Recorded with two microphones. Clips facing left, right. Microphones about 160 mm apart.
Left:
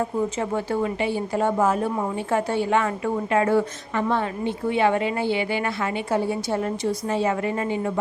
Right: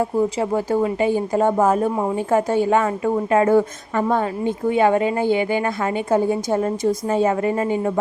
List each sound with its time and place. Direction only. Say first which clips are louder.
0.0 s a woman's voice: right 5 dB; 35° right (ahead or behind)
3.5 s a woman's voice: right 5 dB; 45° right (ahead or behind)
6.5 s a woman's voice: right 5 dB; 35° right (ahead or behind)